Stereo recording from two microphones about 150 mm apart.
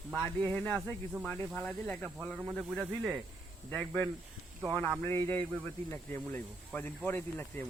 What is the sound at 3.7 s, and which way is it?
Speech, 10° left (ahead or behind).